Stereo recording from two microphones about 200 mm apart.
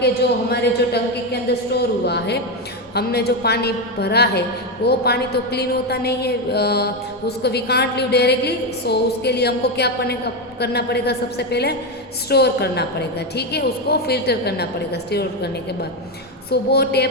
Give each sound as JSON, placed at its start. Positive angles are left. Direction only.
{"t": 0.5, "sound": "a woman's voice", "side_deg": 55}
{"t": 16.5, "sound": "a woman's voice", "side_deg": 55}